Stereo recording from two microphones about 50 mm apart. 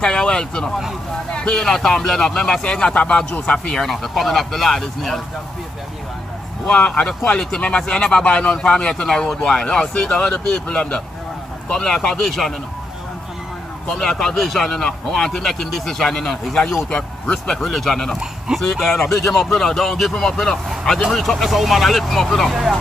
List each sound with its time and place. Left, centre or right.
0.0 s a man's voice: centre
3.5 s a man's voice: centre
3.8 s speech: centre
6.7 s speech: left
11.7 s a man's voice: centre
13.8 s a man's voice: centre